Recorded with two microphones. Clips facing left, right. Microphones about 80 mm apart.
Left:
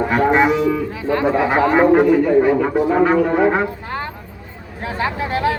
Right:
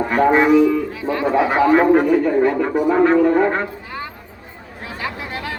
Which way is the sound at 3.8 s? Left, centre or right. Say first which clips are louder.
Left 4 dB; left.